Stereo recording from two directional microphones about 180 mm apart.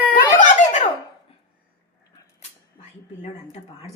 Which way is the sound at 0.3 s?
45° left (ahead or behind).